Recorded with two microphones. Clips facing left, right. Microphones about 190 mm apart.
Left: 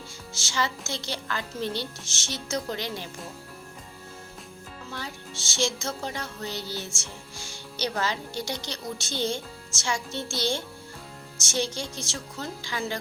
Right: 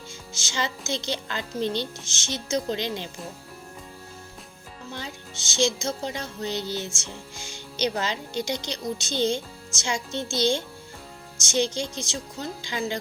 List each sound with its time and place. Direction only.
0.3 s music: 20° right (ahead or behind)
4.9 s music: 20° right (ahead or behind)